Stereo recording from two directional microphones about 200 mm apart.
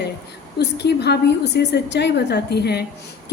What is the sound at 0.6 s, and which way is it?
A woman's voice, 55° left (ahead or behind).